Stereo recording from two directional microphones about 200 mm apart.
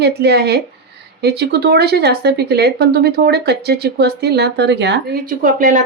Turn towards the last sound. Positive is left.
turn(degrees=-40)  # may be behind; listen again after turning